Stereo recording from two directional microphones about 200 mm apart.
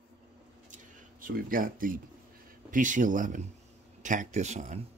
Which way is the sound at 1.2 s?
45° right (ahead or behind).